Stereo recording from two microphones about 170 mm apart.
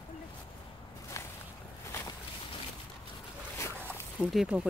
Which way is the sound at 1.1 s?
15° left (ahead or behind).